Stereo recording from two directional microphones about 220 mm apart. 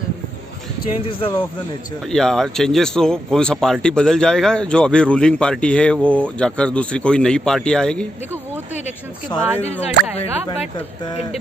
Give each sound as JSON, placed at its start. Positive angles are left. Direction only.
{"t": 2.1, "sound": "speech", "side_deg": 0}
{"t": 9.3, "sound": "speech", "side_deg": 10}